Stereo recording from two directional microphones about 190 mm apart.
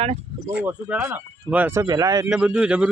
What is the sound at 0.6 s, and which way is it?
Speech, 10° right (ahead or behind).